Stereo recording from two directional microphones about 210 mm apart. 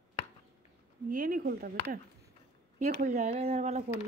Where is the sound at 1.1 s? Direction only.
45° right (ahead or behind).